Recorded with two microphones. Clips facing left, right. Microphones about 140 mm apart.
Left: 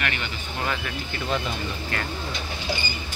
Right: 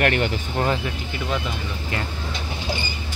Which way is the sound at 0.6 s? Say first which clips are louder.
Right 5 dB; 30° right (ahead or behind).